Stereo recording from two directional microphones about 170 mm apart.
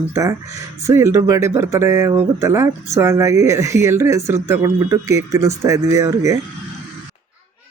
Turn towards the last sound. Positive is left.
turn(degrees=-15)  # may be behind; listen again after turning